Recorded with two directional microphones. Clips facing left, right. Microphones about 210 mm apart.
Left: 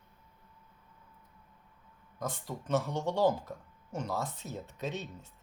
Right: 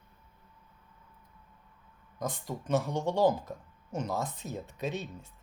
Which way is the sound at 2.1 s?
15° right (ahead or behind).